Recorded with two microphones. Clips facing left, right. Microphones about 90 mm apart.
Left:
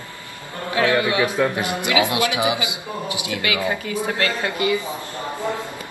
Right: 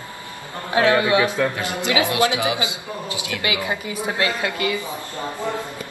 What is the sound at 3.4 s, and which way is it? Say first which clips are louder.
A man's voice: left 1 dB; 20° right (ahead or behind).